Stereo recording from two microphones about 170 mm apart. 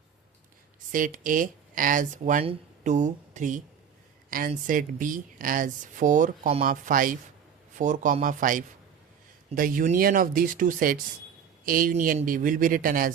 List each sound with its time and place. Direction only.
0.9 s speech: 50° right (ahead or behind)
2.4 s speech: 40° right (ahead or behind)
6.7 s a man's voice: 55° right (ahead or behind)